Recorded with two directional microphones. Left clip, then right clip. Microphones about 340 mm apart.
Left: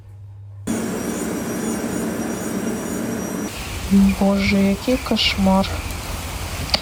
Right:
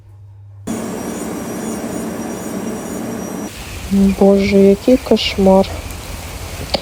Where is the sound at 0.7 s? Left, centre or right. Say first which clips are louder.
Right 1 dB; centre.